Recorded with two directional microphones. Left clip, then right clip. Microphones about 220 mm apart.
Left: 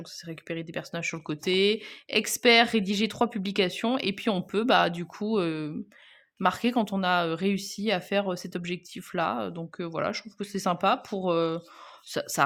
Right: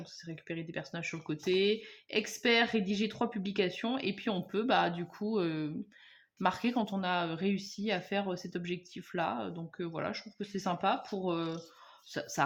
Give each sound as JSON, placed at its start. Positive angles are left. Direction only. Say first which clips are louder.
{"t": 0.3, "sound": "speech", "louder": "left 6 dB", "side_deg": 45}